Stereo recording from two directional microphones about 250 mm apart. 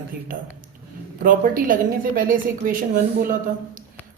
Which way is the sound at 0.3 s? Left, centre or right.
Right.